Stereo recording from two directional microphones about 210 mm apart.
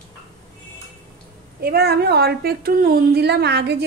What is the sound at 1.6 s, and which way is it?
A woman's voice, 50° right (ahead or behind).